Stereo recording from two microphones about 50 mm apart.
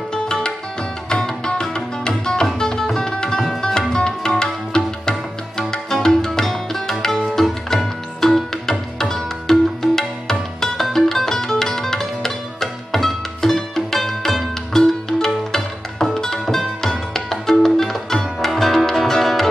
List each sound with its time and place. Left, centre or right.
0.1 s music: centre